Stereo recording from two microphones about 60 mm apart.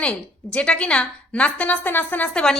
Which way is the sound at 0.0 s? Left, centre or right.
Centre.